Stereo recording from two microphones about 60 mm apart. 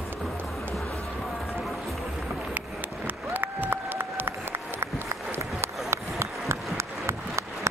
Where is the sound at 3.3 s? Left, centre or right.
Right.